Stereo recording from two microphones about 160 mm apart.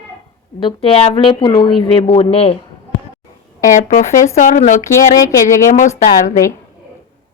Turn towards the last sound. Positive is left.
turn(degrees=50)  # may be behind; listen again after turning